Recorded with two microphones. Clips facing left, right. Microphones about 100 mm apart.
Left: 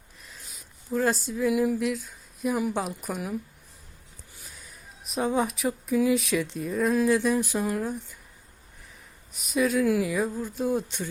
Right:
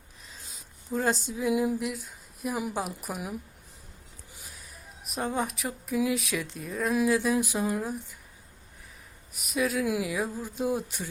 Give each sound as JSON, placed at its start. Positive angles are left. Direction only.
{"t": 0.9, "sound": "speech", "side_deg": -15}
{"t": 1.4, "sound": "a sound", "side_deg": -20}
{"t": 2.7, "sound": "speech", "side_deg": -5}
{"t": 4.5, "sound": "speech", "side_deg": 0}
{"t": 7.3, "sound": "speech", "side_deg": -15}
{"t": 9.3, "sound": "speech", "side_deg": 0}
{"t": 9.8, "sound": "speech", "side_deg": -15}
{"t": 10.1, "sound": "speech", "side_deg": -5}